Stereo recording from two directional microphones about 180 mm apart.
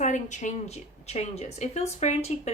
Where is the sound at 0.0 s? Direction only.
40° left (ahead or behind).